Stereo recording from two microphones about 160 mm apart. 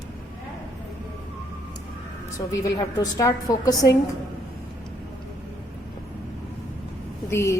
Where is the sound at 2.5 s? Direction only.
20° left (ahead or behind).